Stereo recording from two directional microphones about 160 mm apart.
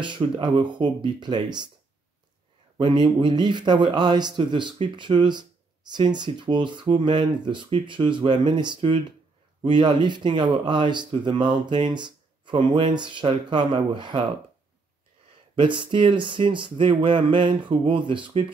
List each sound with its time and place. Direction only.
0.0 s speech: 30° right (ahead or behind)
2.8 s speech: 30° right (ahead or behind)
15.5 s speech: 30° right (ahead or behind)